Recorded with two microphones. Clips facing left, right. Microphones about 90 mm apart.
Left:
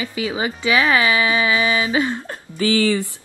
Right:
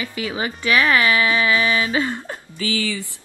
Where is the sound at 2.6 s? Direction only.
55° left (ahead or behind).